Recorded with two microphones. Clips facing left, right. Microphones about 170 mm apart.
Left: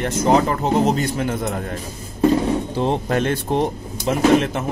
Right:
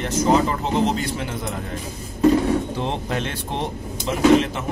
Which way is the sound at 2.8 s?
45° left (ahead or behind).